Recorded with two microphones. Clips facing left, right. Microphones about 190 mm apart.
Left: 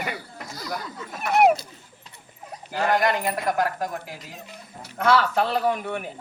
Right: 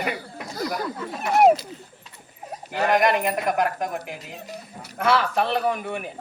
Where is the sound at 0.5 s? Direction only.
50° right (ahead or behind).